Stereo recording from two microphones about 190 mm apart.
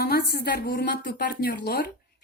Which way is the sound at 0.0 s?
55° left (ahead or behind).